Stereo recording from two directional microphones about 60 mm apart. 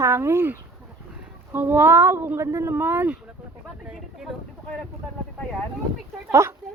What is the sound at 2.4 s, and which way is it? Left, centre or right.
Speech, right.